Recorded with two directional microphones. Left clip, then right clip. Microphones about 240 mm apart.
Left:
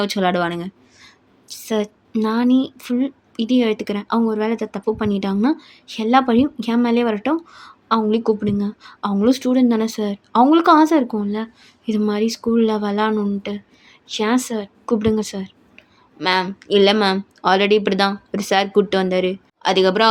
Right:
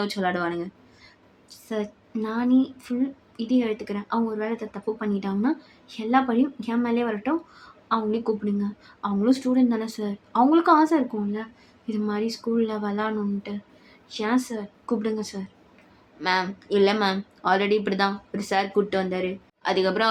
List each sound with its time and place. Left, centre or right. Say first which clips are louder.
0.0 s a woman's voice: left 7 dB; left